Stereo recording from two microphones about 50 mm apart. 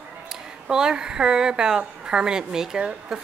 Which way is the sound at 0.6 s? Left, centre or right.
Centre.